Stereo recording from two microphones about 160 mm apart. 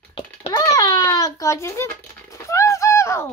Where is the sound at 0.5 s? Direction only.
20° left (ahead or behind).